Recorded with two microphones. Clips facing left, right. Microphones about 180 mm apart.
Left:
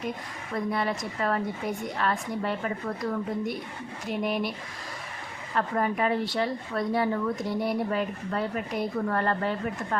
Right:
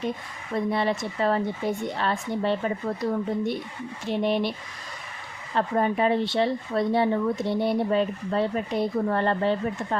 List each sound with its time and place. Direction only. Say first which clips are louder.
0.5 s a woman's voice: right 4 dB; 25° right (ahead or behind)
5.5 s a woman's voice: right 3 dB; 25° right (ahead or behind)